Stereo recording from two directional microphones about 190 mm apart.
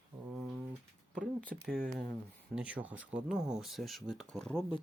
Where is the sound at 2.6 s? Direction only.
5° right (ahead or behind).